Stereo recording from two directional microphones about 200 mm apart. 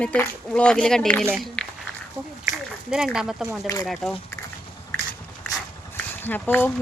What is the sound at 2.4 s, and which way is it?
Speech, 5° right (ahead or behind).